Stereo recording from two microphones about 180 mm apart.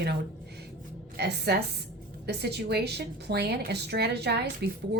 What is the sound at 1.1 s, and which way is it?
A woman's voice, 65° right (ahead or behind).